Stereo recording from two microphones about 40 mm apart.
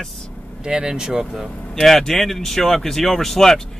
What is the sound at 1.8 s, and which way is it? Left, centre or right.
Speech, centre.